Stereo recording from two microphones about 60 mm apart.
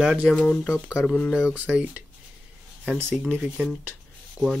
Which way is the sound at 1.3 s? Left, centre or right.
Centre.